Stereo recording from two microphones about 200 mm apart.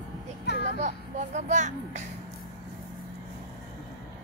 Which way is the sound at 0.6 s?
35° right (ahead or behind).